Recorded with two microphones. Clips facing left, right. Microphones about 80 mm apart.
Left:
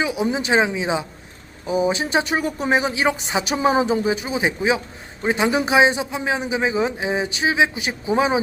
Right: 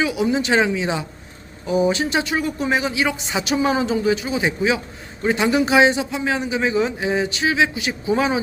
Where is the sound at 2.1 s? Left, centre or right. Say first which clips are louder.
Left 1 dB; left.